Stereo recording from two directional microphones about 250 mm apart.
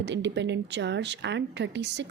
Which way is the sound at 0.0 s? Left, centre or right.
Right.